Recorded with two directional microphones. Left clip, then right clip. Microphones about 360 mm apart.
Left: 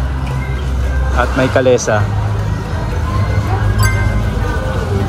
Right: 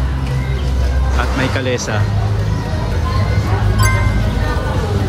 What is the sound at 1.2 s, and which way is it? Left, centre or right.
Speech, centre.